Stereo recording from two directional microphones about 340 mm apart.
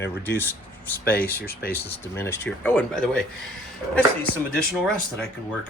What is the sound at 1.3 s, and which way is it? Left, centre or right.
Speech, left.